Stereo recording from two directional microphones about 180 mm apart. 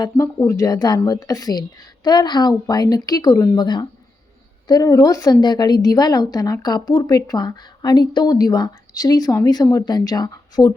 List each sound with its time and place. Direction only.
0.0 s a woman's voice: 15° left (ahead or behind)